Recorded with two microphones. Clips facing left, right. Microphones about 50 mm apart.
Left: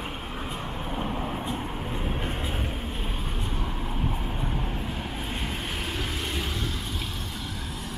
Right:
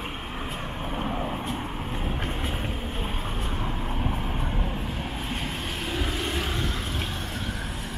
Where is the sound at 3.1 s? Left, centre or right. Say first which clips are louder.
Right 1 dB; right.